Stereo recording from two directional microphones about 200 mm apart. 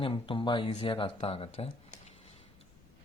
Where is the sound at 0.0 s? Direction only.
25° left (ahead or behind).